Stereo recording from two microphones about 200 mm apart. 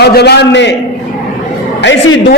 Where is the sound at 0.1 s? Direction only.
55° left (ahead or behind).